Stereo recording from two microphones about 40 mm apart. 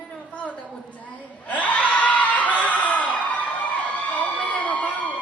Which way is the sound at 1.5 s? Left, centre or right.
Left.